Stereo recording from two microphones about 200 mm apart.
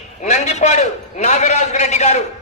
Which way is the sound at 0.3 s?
35° left (ahead or behind).